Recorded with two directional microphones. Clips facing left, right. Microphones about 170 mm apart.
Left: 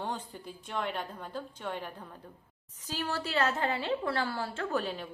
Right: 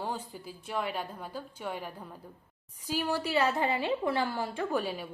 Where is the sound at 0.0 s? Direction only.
5° right (ahead or behind).